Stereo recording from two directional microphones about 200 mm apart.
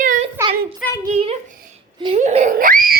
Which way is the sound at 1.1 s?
30° right (ahead or behind).